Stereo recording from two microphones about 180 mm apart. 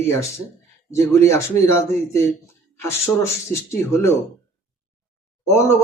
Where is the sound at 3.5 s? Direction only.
15° left (ahead or behind).